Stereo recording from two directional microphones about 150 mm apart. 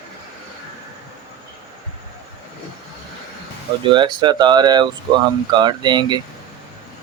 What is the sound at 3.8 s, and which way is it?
Speech, 30° right (ahead or behind).